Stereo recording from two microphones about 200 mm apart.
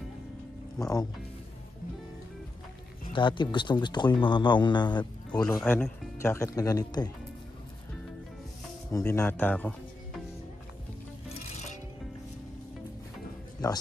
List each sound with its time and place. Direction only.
0.7 s speech: 15° left (ahead or behind)
3.1 s speech: 25° left (ahead or behind)
5.6 s speech: 10° left (ahead or behind)
8.9 s speech: 15° left (ahead or behind)